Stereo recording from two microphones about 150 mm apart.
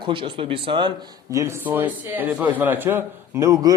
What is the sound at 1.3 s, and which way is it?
A man's voice, 20° right (ahead or behind).